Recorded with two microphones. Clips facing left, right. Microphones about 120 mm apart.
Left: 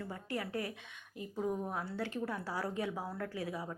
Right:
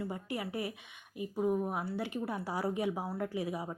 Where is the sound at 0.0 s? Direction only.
15° right (ahead or behind).